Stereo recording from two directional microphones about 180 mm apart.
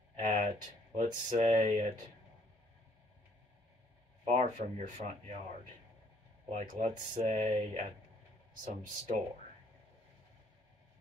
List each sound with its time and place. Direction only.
0.2 s a sound: 45° right (ahead or behind)
0.9 s speech: 40° right (ahead or behind)
4.2 s speech: 40° right (ahead or behind)
6.5 s speech: 45° right (ahead or behind)